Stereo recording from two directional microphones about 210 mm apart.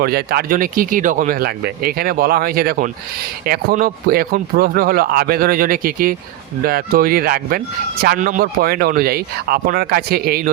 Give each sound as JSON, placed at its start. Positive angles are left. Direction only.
{"t": 0.0, "sound": "speech", "side_deg": -45}